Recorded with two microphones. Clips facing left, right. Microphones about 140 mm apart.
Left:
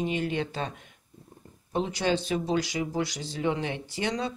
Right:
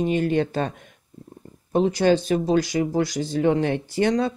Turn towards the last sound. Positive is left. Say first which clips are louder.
# right 9 dB
turn(degrees=-50)  # may be behind; listen again after turning